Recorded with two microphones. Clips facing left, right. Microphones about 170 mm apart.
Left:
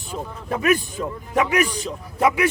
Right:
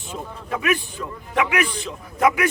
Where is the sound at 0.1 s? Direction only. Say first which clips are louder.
Left 2 dB; 40° left (ahead or behind).